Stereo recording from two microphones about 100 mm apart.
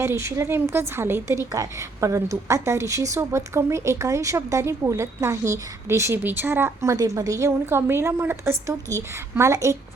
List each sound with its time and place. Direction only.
0.0 s a woman's voice: 30° right (ahead or behind)
6.9 s a woman's voice: 35° right (ahead or behind)